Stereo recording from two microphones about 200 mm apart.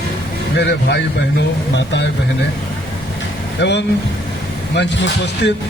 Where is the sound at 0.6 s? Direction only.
55° left (ahead or behind).